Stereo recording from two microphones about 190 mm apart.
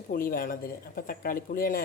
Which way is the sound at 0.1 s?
50° left (ahead or behind).